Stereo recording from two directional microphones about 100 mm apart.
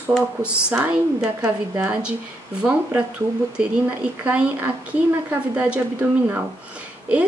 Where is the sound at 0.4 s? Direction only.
10° right (ahead or behind).